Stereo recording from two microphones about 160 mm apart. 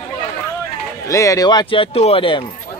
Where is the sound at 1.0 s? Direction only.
20° left (ahead or behind).